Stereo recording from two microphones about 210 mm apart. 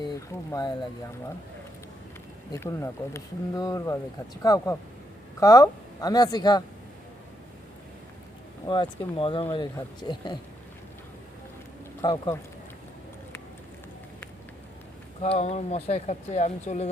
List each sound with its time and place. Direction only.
0.0 s speech: 20° left (ahead or behind)
2.5 s speech: 15° left (ahead or behind)
8.6 s speech: 20° left (ahead or behind)
12.0 s speech: 20° left (ahead or behind)
15.2 s speech: 30° left (ahead or behind)